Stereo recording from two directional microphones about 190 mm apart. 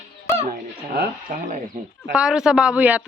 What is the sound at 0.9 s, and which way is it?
Speech, 45° right (ahead or behind).